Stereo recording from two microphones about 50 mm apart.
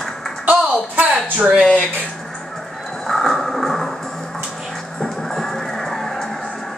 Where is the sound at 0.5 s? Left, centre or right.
Right.